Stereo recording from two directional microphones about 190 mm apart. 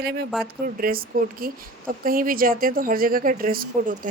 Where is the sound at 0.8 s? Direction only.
50° right (ahead or behind).